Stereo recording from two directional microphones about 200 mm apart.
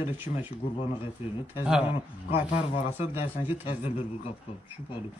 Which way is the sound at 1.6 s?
5° right (ahead or behind).